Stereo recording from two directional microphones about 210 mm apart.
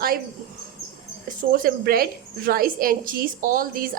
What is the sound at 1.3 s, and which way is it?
A woman's voice, 40° right (ahead or behind).